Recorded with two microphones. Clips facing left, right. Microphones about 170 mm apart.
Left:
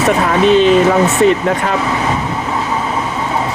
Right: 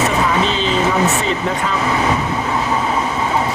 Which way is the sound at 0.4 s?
55° left (ahead or behind).